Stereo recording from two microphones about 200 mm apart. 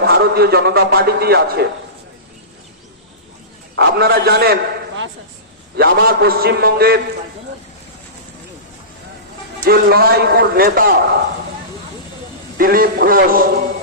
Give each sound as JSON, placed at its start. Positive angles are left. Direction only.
{"t": 0.0, "sound": "a man's voice", "side_deg": -50}
{"t": 3.8, "sound": "a man's voice", "side_deg": -55}
{"t": 5.7, "sound": "a man's voice", "side_deg": -55}
{"t": 9.6, "sound": "a man's voice", "side_deg": -50}
{"t": 12.5, "sound": "a man's voice", "side_deg": -45}